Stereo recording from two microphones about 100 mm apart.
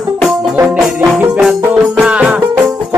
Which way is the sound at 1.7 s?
10° right (ahead or behind).